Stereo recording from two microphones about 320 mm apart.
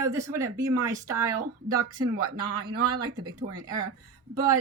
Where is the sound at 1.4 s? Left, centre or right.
Right.